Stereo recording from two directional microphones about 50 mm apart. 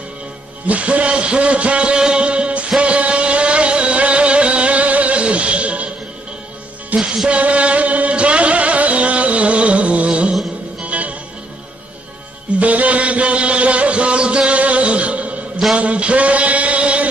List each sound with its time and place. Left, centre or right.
0.7 s a man's voice: right
2.8 s music: right
6.9 s music: right
12.5 s a sound: right